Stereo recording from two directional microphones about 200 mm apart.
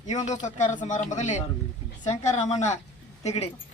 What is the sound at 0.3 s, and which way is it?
Speech, 40° left (ahead or behind).